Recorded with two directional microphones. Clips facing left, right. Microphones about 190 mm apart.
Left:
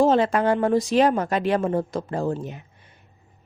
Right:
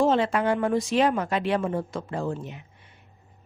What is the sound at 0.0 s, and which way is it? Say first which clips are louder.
Speech: left 3 dB; 40° left (ahead or behind).